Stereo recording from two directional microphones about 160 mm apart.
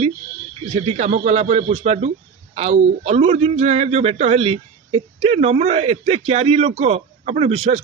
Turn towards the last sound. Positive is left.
turn(degrees=-40)  # may be behind; listen again after turning